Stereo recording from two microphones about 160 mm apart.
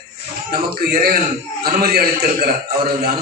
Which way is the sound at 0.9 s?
70° right (ahead or behind).